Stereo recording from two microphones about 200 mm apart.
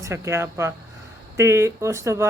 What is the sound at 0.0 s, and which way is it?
Speech, 15° right (ahead or behind).